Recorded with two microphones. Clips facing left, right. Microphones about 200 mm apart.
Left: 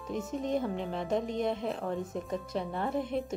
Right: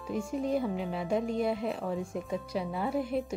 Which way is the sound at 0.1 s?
5° right (ahead or behind).